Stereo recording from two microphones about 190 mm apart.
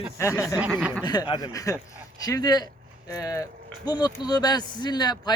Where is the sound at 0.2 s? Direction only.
15° left (ahead or behind).